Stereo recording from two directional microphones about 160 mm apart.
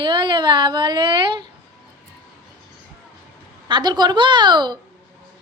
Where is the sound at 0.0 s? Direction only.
30° right (ahead or behind).